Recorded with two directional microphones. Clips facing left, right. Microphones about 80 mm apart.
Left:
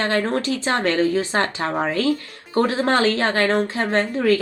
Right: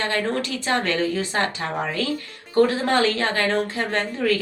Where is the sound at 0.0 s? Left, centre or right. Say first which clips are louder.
Left 3 dB; left.